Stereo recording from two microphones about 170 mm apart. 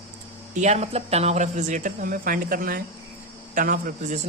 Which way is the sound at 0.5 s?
45° right (ahead or behind).